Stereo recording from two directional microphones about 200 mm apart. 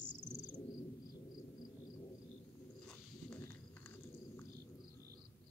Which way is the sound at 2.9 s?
10° left (ahead or behind).